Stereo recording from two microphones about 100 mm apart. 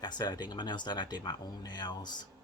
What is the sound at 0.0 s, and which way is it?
Speech, 45° left (ahead or behind).